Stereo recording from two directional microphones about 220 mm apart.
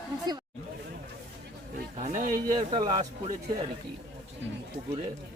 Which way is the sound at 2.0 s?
35° right (ahead or behind).